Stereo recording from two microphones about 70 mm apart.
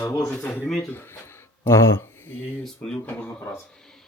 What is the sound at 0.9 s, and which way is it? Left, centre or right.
Speech, left.